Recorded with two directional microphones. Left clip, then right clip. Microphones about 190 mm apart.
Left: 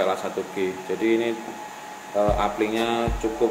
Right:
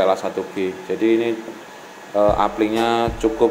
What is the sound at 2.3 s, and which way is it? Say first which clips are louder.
Speech: right 5 dB; 30° right (ahead or behind).